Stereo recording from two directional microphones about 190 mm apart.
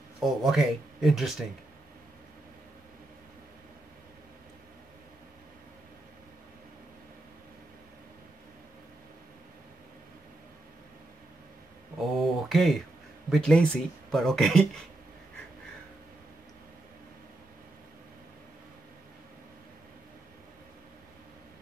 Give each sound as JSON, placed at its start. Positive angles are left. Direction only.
{"t": 0.2, "sound": "speech", "side_deg": 0}
{"t": 12.0, "sound": "speech", "side_deg": 0}